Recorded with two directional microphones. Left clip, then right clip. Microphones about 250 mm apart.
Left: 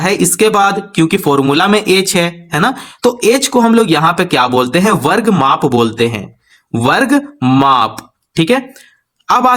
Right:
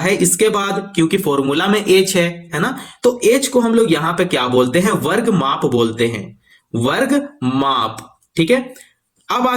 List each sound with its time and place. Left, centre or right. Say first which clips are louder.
0.0 s speech: left 3 dB; left